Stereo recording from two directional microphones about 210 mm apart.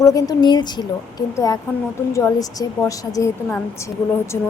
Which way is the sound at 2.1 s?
15° left (ahead or behind).